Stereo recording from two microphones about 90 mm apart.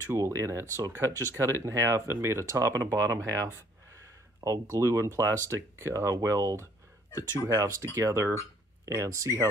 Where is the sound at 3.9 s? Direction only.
35° right (ahead or behind).